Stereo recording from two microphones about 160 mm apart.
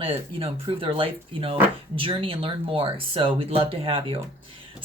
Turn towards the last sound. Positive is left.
turn(degrees=-35)  # may be behind; listen again after turning